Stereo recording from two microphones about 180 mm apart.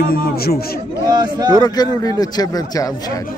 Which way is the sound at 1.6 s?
20° left (ahead or behind).